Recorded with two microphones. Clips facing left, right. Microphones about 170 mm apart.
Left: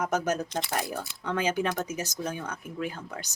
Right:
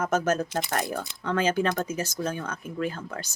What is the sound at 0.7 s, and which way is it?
Speech, 10° left (ahead or behind).